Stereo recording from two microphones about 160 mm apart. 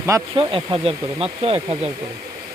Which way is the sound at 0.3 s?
35° right (ahead or behind).